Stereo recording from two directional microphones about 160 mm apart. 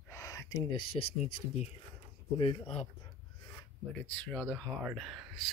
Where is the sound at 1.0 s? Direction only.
25° left (ahead or behind).